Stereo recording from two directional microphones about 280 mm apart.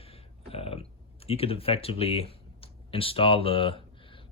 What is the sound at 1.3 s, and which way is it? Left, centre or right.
Speech, left.